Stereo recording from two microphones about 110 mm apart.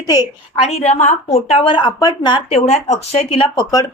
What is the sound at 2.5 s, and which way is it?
A woman's voice, 80° left.